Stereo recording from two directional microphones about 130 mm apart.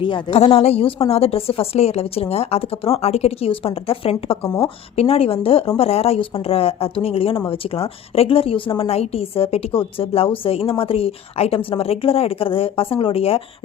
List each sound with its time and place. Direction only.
0.3 s a woman's voice: 50° left (ahead or behind)